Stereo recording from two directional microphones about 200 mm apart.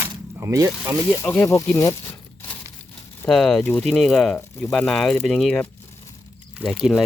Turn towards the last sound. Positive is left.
turn(degrees=0)  # may be behind; listen again after turning